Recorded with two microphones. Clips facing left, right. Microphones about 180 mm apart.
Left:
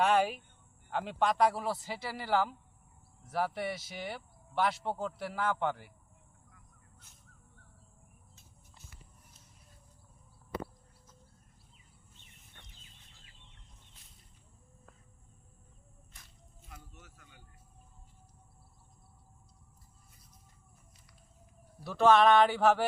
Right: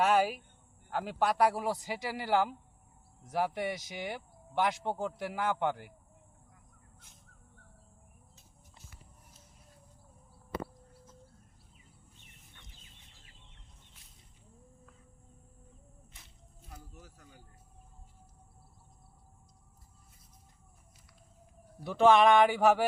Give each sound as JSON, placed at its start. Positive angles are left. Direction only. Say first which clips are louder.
{"t": 0.0, "sound": "speech", "louder": "right 1 dB", "side_deg": -5}
{"t": 16.6, "sound": "a sound", "louder": "right 3 dB", "side_deg": -35}
{"t": 21.8, "sound": "speech", "louder": "right 1 dB", "side_deg": -15}